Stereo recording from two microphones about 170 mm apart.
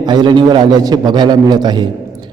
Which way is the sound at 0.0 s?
25° right (ahead or behind).